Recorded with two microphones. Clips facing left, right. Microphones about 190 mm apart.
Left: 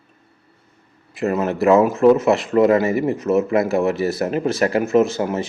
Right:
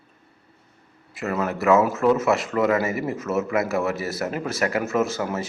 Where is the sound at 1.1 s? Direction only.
25° left (ahead or behind).